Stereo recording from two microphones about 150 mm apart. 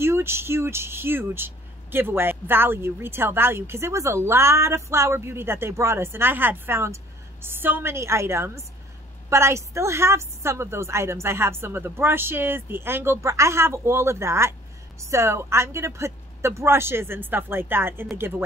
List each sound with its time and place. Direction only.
0.0 s a woman's voice: 15° right (ahead or behind)